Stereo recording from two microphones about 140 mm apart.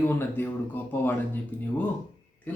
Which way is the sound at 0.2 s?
15° left (ahead or behind).